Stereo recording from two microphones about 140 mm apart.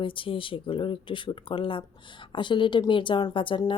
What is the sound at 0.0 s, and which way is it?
Speech, 40° left (ahead or behind).